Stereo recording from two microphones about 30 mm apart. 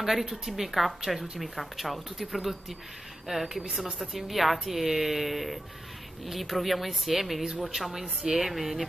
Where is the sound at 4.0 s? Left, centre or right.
Centre.